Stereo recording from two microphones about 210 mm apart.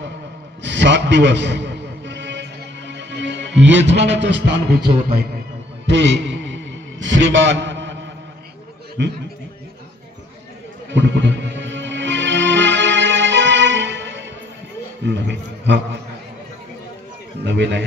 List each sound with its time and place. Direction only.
0.6 s a sound: 60° right (ahead or behind)
2.9 s music: 55° right (ahead or behind)
5.9 s a sound: 60° right (ahead or behind)
9.0 s a man's voice: 55° right (ahead or behind)
10.9 s music: 60° right (ahead or behind)
15.0 s a man's voice: 55° right (ahead or behind)
17.5 s a man's voice: 55° right (ahead or behind)